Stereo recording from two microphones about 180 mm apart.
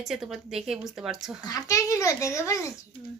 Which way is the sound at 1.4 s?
20° left (ahead or behind).